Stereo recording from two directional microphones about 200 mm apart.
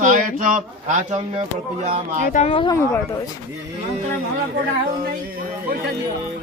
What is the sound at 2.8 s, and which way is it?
Speech, 10° left (ahead or behind).